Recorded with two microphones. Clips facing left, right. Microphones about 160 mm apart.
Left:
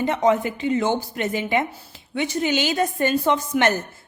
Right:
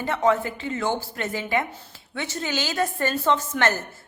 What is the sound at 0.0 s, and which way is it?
A woman's voice, 20° left (ahead or behind).